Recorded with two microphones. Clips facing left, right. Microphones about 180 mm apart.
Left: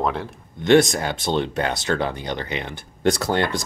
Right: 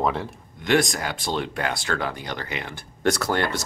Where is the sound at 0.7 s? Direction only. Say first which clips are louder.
Left 6 dB; 25° left (ahead or behind).